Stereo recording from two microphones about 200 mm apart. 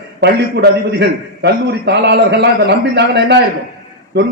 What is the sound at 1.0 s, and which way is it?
A man's voice, 60° right (ahead or behind).